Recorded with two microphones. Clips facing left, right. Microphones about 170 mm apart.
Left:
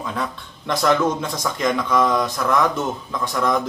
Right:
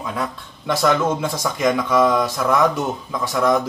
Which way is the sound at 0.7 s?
5° right (ahead or behind).